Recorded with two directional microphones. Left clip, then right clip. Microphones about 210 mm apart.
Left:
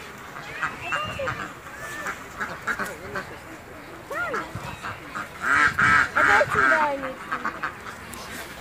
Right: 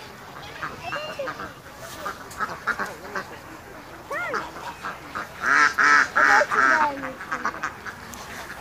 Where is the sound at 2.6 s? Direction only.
35° left (ahead or behind).